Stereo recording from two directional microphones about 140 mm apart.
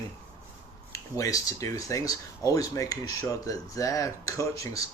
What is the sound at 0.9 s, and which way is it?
Speech, 25° left (ahead or behind).